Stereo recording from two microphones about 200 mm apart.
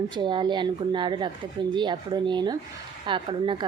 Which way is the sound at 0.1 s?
25° right (ahead or behind).